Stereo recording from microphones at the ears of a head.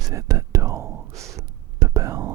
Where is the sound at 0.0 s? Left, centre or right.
Right.